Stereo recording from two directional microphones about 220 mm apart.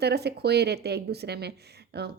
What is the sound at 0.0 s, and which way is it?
A woman's voice, 50° right (ahead or behind).